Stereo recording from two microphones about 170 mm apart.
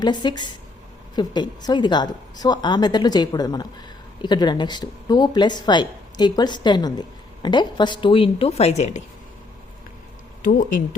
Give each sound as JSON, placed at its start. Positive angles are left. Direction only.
{"t": 0.0, "sound": "a woman's voice", "side_deg": 25}
{"t": 10.4, "sound": "speech", "side_deg": 55}